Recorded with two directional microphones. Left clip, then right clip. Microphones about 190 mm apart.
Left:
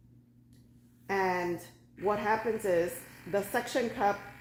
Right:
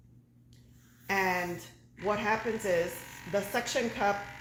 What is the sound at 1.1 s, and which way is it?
Speech, 10° left (ahead or behind).